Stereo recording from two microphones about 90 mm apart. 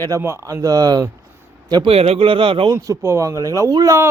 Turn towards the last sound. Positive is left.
turn(degrees=-40)  # may be behind; listen again after turning